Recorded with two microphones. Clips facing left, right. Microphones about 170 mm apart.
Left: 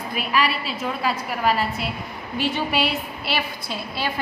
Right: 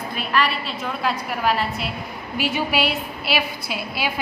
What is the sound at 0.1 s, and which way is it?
A woman's voice, 5° left (ahead or behind).